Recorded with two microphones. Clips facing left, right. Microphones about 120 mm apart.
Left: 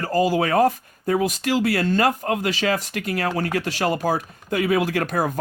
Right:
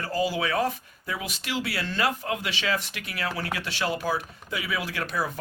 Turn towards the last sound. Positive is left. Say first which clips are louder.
# left 7 dB
turn(degrees=50)  # may be behind; listen again after turning